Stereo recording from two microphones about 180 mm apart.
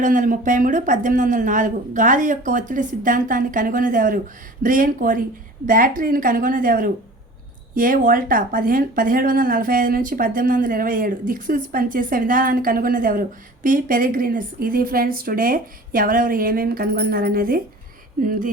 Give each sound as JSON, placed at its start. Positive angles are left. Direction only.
{"t": 0.0, "sound": "speech", "side_deg": -45}